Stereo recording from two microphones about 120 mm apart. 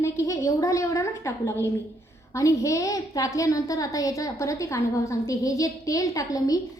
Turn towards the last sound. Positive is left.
turn(degrees=30)  # may be behind; listen again after turning